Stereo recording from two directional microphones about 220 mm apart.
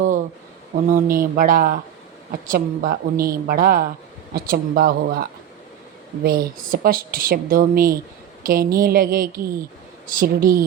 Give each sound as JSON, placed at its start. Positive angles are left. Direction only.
{"t": 0.9, "sound": "speech", "side_deg": -40}